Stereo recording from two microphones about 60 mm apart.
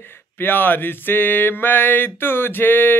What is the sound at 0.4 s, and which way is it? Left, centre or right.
Mantra, left.